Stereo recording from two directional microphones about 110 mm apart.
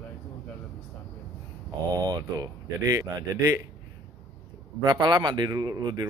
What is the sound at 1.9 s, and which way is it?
Speech, 35° right (ahead or behind).